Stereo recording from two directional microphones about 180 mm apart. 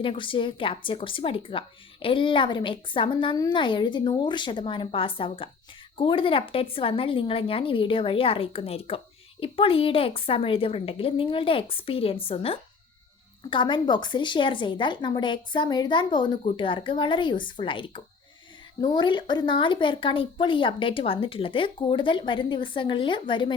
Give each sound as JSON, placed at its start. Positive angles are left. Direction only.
{"t": 0.0, "sound": "a woman's voice", "side_deg": 30}